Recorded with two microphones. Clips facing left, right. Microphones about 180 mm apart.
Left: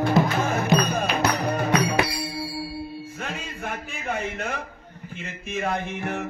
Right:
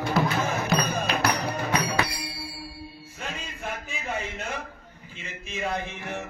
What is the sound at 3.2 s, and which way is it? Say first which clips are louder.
Music: even; 55° left (ahead or behind).